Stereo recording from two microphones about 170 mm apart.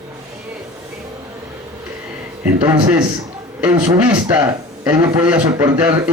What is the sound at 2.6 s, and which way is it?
A man's voice, 10° right (ahead or behind).